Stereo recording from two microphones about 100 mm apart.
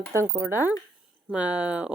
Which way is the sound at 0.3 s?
25° right (ahead or behind).